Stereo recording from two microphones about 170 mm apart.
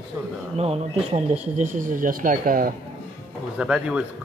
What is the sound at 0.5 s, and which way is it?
Speech, 35° right (ahead or behind).